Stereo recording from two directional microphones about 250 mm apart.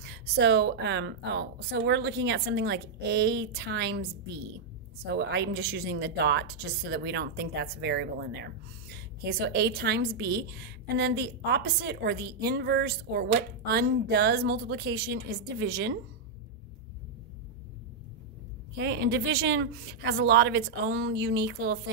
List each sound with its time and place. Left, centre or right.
0.0 s a woman's voice: right
5.0 s a woman's voice: right
18.8 s a woman's voice: right